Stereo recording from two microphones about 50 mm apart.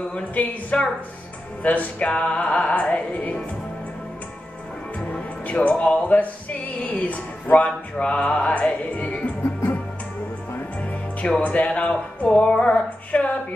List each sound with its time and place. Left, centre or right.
0.1 s music: left
5.1 s music: left
10.8 s speech: left
12.4 s music: left